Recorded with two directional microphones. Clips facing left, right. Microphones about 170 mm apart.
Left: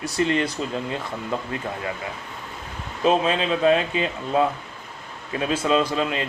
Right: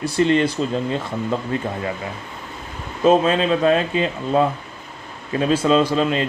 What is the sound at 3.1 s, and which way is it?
Speech, 40° right (ahead or behind).